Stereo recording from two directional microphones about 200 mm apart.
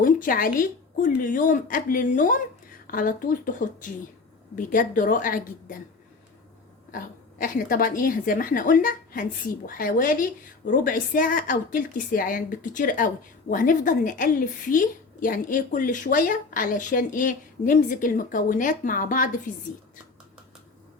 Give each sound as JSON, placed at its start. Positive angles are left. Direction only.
{"t": 0.0, "sound": "a woman's voice", "side_deg": 45}
{"t": 6.9, "sound": "a woman's voice", "side_deg": 45}